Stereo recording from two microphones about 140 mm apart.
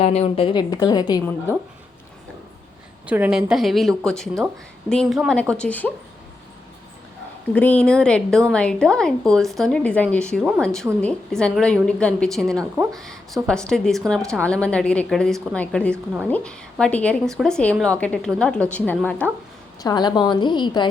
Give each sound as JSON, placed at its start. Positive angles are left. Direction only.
{"t": 0.0, "sound": "a woman's voice", "side_deg": 45}
{"t": 0.7, "sound": "a woman's voice", "side_deg": 30}
{"t": 1.2, "sound": "a woman's voice", "side_deg": 15}
{"t": 3.1, "sound": "a woman's voice", "side_deg": -10}
{"t": 7.5, "sound": "a woman's voice", "side_deg": 10}
{"t": 19.8, "sound": "a woman's voice", "side_deg": 30}